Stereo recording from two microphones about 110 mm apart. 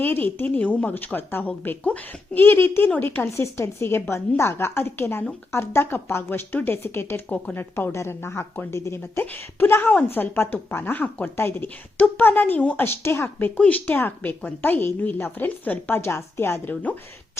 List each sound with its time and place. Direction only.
0.0 s a woman's voice: 20° left (ahead or behind)